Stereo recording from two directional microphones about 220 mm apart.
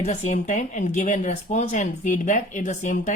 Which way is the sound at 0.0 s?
30° left (ahead or behind).